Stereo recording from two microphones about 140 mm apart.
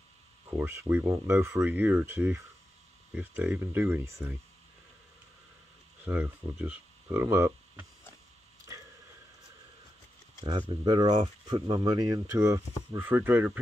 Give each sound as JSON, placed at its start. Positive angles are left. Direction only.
{"t": 0.5, "sound": "speech", "side_deg": -15}
{"t": 6.0, "sound": "speech", "side_deg": -10}
{"t": 10.7, "sound": "speech", "side_deg": -30}